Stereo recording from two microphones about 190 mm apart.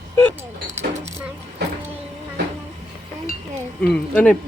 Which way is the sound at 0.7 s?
35° right (ahead or behind).